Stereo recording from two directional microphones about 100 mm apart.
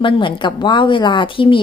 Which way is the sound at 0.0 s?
55° left (ahead or behind).